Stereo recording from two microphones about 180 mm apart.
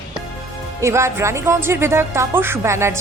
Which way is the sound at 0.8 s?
15° right (ahead or behind).